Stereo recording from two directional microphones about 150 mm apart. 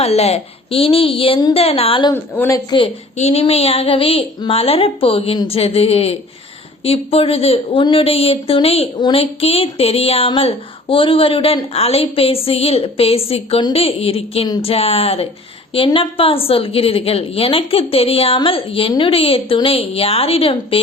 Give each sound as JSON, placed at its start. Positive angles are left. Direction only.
{"t": 0.0, "sound": "speech", "side_deg": 45}
{"t": 2.1, "sound": "speech", "side_deg": 15}
{"t": 2.6, "sound": "speech", "side_deg": 35}